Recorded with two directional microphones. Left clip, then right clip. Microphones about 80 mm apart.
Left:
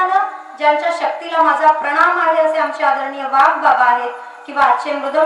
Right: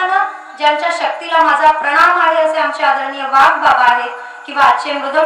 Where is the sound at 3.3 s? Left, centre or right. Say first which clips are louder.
Right 2 dB; left.